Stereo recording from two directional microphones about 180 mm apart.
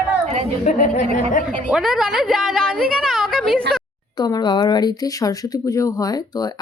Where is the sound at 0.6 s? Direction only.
45° left (ahead or behind).